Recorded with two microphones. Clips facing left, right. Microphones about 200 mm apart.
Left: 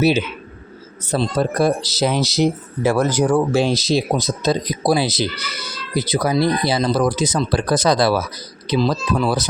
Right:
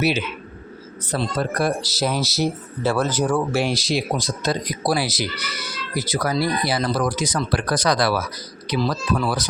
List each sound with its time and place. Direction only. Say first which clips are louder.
0.0 s speech: left 5 dB; 25° left (ahead or behind)